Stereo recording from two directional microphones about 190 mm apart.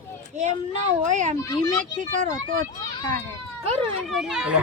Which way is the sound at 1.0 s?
40° right (ahead or behind).